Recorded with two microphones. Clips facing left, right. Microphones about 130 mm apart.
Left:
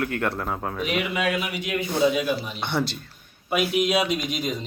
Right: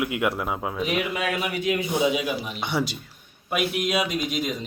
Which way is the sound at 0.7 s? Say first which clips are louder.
Left 1 dB; 20° right (ahead or behind).